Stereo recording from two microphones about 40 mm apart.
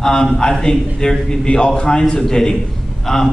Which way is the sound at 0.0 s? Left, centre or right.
Centre.